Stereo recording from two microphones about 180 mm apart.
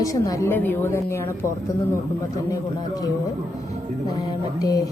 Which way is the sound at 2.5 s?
20° left (ahead or behind).